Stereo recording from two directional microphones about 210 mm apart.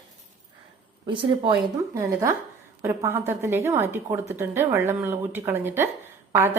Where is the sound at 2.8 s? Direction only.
15° right (ahead or behind).